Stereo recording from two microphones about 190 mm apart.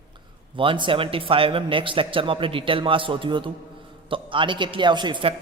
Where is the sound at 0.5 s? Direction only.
25° right (ahead or behind).